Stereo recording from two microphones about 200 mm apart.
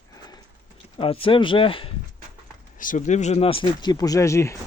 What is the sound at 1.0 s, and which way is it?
Speech, 25° left (ahead or behind).